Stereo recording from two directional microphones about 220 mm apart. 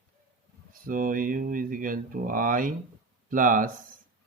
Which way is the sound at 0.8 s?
40° right (ahead or behind).